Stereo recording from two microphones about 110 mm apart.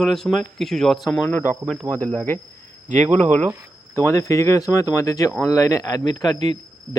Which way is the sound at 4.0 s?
25° left (ahead or behind).